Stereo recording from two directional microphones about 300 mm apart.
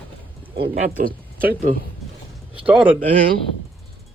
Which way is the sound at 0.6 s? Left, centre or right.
Right.